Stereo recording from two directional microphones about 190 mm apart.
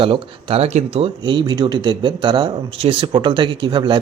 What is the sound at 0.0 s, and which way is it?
Speech, 25° right (ahead or behind).